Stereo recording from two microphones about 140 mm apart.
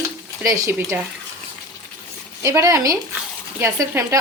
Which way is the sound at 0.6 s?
20° right (ahead or behind).